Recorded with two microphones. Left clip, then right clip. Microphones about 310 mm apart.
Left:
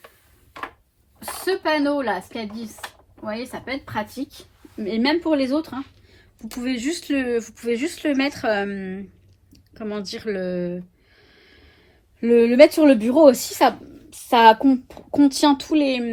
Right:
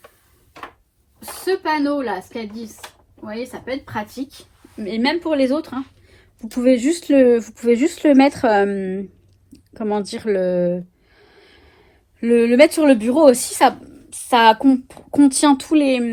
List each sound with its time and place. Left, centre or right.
1.5 s a woman's voice: centre; by 6.2 s right
6.8 s speech: centre